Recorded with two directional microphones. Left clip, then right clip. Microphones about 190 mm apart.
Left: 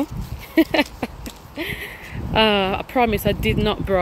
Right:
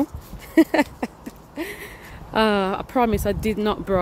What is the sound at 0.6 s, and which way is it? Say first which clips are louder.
Speech: even; 10° right (ahead or behind).